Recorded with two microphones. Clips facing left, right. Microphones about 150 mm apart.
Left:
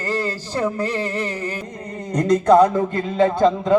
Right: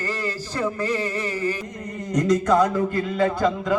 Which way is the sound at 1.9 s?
30° left (ahead or behind).